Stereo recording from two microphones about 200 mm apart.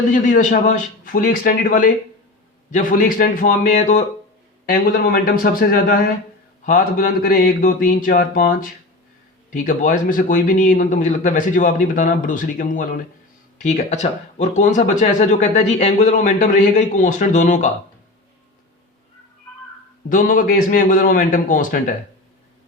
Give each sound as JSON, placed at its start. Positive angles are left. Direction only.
{"t": 0.1, "sound": "a man's voice", "side_deg": 40}
{"t": 4.6, "sound": "a man's voice", "side_deg": 45}
{"t": 20.1, "sound": "a man's voice", "side_deg": 45}